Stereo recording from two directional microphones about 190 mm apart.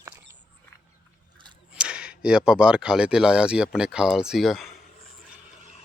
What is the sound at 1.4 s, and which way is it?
Speech, 5° right (ahead or behind).